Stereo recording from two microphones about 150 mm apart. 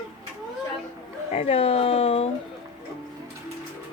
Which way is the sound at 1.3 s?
45° left (ahead or behind).